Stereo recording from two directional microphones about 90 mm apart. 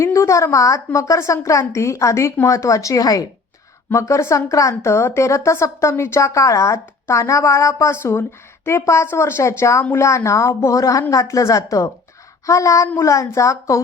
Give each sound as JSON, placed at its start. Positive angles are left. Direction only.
{"t": 0.0, "sound": "a woman's voice", "side_deg": 35}
{"t": 3.8, "sound": "a woman's voice", "side_deg": 30}